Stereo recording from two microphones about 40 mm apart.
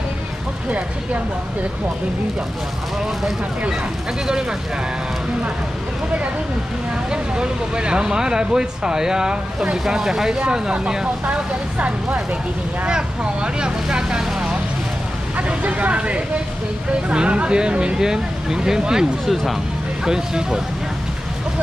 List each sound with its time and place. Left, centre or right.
4.3 s speech: centre
7.1 s speech: right
11.2 s speech: right
13.8 s vehicle: centre
15.3 s speech: right; by 19.0 s centre
20.1 s speech: centre